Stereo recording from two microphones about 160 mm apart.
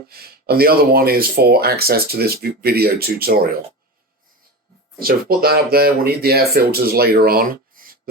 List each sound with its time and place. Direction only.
0.1 s speech: 75° right (ahead or behind)
4.9 s speech: 70° right (ahead or behind)